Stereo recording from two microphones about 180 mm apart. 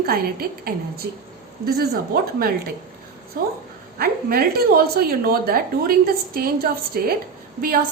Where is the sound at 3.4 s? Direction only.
50° right (ahead or behind).